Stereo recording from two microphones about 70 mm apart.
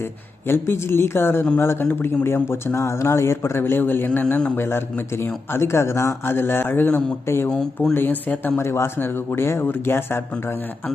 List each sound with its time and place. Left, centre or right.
0.0 s speech: left
4.5 s speech: left
8.6 s speech: left